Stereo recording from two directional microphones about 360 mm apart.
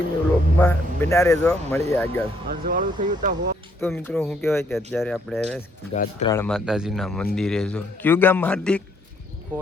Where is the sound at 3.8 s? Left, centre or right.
Centre.